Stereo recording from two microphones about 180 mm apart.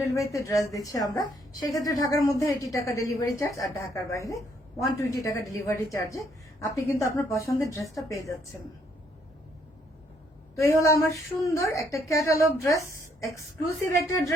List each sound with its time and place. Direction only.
0.0 s a woman's voice: 15° left (ahead or behind)
10.5 s a woman's voice: 15° left (ahead or behind)